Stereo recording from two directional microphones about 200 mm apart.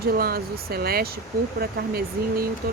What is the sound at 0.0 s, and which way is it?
Speech, 50° right (ahead or behind).